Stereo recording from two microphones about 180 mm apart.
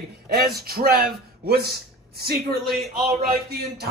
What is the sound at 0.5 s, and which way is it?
Speech, 55° right (ahead or behind).